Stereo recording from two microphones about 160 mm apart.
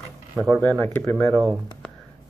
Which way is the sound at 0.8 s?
10° left (ahead or behind).